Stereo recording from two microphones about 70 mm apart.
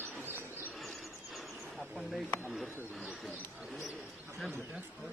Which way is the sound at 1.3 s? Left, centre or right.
Centre.